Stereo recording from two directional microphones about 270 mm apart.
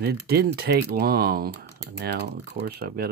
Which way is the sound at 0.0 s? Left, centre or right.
Right.